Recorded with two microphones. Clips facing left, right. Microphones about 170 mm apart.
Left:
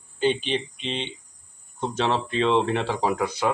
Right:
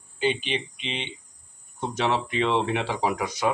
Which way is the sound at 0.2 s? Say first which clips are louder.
Left 3 dB; 10° right (ahead or behind).